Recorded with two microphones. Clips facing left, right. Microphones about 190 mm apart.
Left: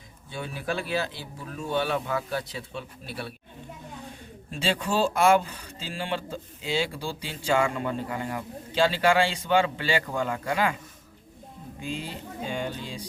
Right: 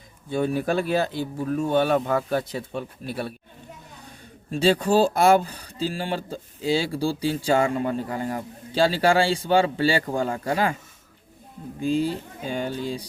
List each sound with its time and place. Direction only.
0.3 s speech: 45° right (ahead or behind)
4.5 s speech: 35° right (ahead or behind)
11.8 s speech: 35° right (ahead or behind)